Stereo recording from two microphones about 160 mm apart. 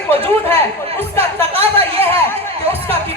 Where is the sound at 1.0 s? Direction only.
15° left (ahead or behind).